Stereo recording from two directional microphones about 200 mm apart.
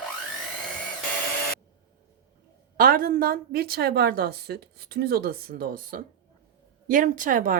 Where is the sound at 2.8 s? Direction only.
45° right (ahead or behind).